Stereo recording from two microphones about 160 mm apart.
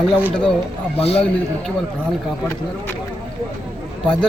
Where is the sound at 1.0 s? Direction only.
40° left (ahead or behind).